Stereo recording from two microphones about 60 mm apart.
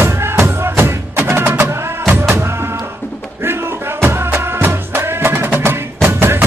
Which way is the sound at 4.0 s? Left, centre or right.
Right.